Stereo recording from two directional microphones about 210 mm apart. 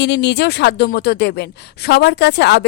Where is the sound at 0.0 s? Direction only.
55° left (ahead or behind).